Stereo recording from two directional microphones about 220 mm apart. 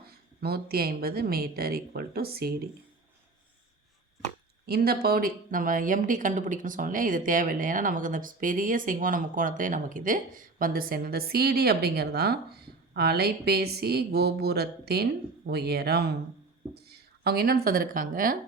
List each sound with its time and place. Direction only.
0.1 s a woman's voice: 45° right (ahead or behind)
4.6 s speech: 45° right (ahead or behind)